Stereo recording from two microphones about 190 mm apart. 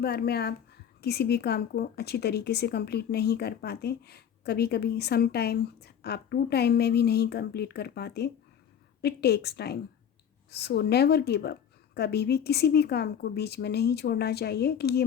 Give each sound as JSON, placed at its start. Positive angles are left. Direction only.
{"t": 0.0, "sound": "a woman's voice", "side_deg": 60}